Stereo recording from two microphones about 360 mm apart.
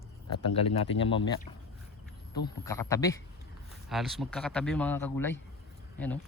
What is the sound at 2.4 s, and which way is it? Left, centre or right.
Speech, centre.